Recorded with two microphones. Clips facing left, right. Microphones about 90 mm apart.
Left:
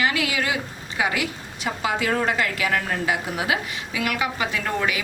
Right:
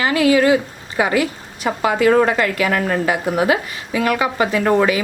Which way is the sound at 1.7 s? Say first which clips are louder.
Right 9 dB; 50° right (ahead or behind).